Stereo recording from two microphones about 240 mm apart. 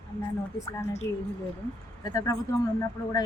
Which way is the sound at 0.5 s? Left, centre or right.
Left.